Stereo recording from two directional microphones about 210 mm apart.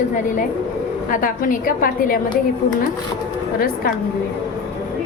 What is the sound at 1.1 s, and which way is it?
A woman's voice, 40° left (ahead or behind).